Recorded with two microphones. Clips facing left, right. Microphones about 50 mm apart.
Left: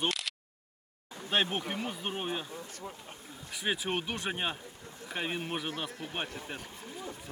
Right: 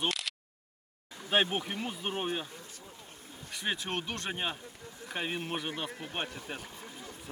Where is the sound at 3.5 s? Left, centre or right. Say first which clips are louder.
Left 2 dB; centre.